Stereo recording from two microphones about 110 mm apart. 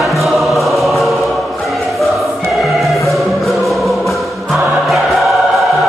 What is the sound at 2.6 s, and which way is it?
Music, centre (ahead or behind).